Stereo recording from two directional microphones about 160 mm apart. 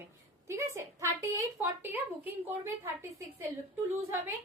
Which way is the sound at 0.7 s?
20° right (ahead or behind).